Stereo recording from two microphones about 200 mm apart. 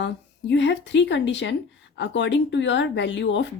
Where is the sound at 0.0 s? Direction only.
65° left (ahead or behind).